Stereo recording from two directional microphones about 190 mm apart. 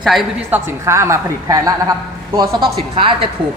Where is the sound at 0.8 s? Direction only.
15° right (ahead or behind).